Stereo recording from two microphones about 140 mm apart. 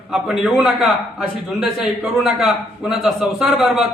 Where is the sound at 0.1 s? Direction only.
Centre (ahead or behind).